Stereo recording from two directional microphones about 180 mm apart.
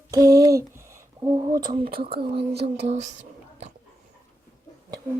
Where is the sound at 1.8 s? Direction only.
55° right (ahead or behind).